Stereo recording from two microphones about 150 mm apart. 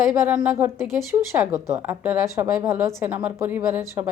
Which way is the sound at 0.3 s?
10° right (ahead or behind).